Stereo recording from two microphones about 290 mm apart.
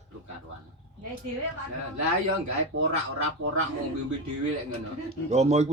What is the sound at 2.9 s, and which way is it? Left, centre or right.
Speech, right.